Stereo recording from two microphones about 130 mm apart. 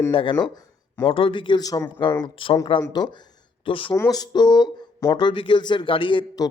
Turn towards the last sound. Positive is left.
turn(degrees=35)  # may be behind; listen again after turning